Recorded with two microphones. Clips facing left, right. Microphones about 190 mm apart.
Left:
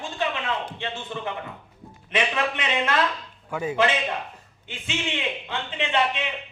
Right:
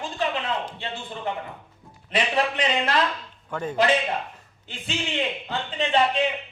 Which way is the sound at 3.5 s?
10° left (ahead or behind).